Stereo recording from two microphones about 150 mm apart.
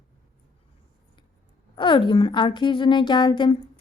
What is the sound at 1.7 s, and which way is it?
A woman's voice, 35° left (ahead or behind).